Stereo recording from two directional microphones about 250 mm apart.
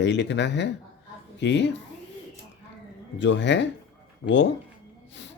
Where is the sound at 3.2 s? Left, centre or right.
Left.